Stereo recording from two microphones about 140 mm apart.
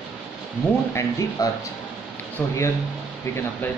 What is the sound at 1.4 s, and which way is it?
Speech, 25° left (ahead or behind).